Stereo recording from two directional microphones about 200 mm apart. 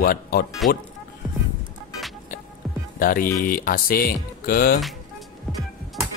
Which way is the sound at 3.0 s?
45° left (ahead or behind).